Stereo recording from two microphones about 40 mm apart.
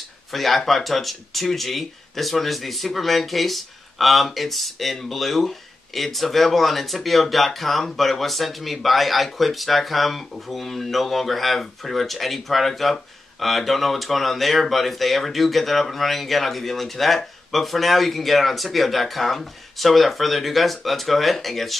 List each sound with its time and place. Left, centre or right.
0.3 s speech: centre